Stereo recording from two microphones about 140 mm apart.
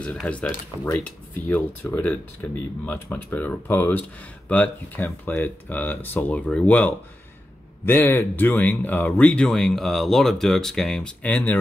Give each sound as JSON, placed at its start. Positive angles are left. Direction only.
{"t": 0.0, "sound": "speech", "side_deg": 10}